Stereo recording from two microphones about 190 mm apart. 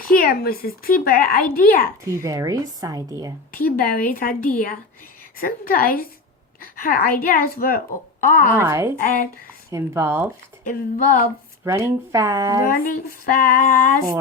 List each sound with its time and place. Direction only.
0.1 s speech: 50° left (ahead or behind)
2.0 s a woman's voice: 15° right (ahead or behind)
3.5 s speech: 50° left (ahead or behind)
8.5 s a woman's voice: 15° right (ahead or behind)
9.0 s speech: 45° left (ahead or behind)
9.7 s a woman's voice: 15° right (ahead or behind)
10.7 s speech: 45° left (ahead or behind)
11.6 s a woman's voice: 15° right (ahead or behind)
12.6 s speech: 45° left (ahead or behind)